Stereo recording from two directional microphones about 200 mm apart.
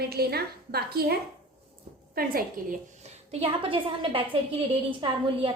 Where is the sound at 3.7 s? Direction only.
25° right (ahead or behind).